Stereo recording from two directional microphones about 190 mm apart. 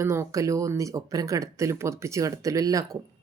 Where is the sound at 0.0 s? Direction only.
15° right (ahead or behind).